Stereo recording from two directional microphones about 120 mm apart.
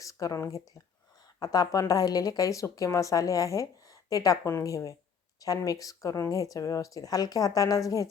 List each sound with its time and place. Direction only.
0.0 s speech: 30° left (ahead or behind)